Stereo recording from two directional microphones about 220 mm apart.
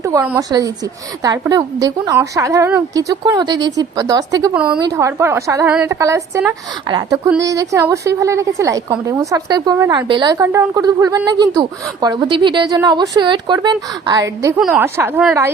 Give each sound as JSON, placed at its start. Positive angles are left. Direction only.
{"t": 0.0, "sound": "a woman's voice", "side_deg": -15}
{"t": 4.5, "sound": "a woman's voice", "side_deg": -5}
{"t": 4.8, "sound": "a woman's voice", "side_deg": -15}